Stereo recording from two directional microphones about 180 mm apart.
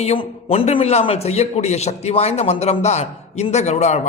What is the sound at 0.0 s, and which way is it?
A man's voice, 30° left (ahead or behind).